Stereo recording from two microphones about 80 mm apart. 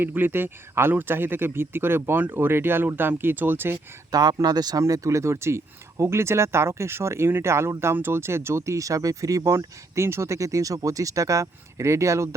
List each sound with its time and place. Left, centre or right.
0.0 s speech: right
4.1 s speech: right
4.8 s speech: right